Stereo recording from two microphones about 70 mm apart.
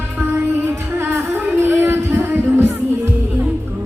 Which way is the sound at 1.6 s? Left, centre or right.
Right.